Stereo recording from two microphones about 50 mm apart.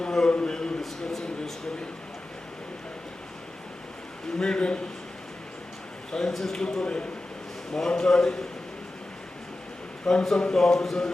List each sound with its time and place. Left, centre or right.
0.0 s a sound: centre
4.4 s a man's voice: centre
6.1 s a man's voice: centre
10.1 s a man's voice: centre